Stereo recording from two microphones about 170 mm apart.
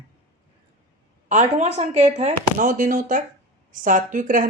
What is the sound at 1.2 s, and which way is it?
Speech, 45° right (ahead or behind).